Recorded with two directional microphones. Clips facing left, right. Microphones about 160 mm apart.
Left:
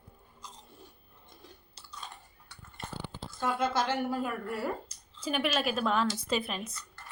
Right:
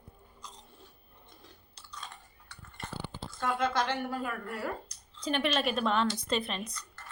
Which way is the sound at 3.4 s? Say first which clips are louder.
Even; 5° left (ahead or behind).